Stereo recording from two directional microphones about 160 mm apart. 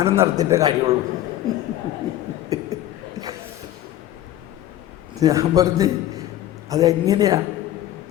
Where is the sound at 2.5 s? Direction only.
20° right (ahead or behind).